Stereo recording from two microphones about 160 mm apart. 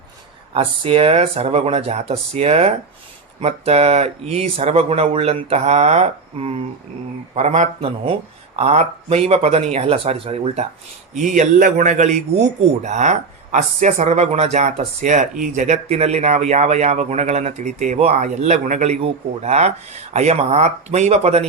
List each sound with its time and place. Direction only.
0.5 s speech: 35° right (ahead or behind)
11.2 s speech: 50° right (ahead or behind)